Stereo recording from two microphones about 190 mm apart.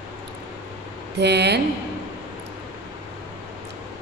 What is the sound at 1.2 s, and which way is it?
Speech, 60° right (ahead or behind).